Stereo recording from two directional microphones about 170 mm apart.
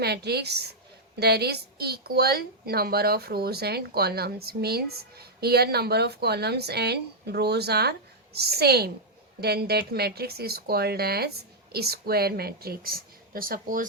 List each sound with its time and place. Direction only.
0.0 s a woman's voice: 70° right (ahead or behind); by 13.8 s 55° right (ahead or behind)